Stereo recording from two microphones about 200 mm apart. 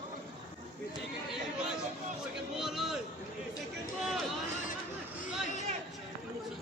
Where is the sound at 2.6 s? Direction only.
Centre (ahead or behind).